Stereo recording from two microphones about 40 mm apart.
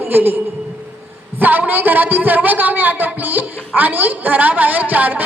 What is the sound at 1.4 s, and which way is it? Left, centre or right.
A woman's voice, right.